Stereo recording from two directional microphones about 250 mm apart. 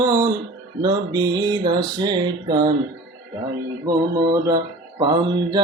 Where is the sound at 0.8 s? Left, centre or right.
Centre.